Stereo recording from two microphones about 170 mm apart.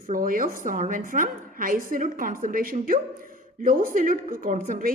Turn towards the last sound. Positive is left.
turn(degrees=-50)  # may be behind; listen again after turning